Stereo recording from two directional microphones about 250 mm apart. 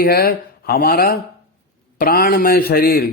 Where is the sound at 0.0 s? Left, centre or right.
Left.